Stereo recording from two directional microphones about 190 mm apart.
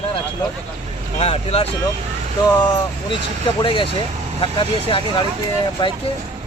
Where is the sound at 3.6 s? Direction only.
25° left (ahead or behind).